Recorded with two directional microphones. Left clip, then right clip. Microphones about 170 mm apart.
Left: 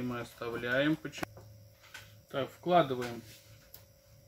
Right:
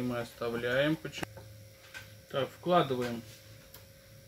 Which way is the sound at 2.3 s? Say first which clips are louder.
Even; 15° left (ahead or behind).